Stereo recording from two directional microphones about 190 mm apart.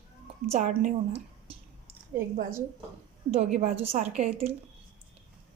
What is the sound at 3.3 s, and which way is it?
A woman's voice, 35° right (ahead or behind).